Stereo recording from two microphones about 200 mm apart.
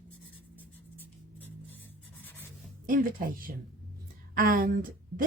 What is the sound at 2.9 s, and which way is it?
A woman's voice, 45° right (ahead or behind).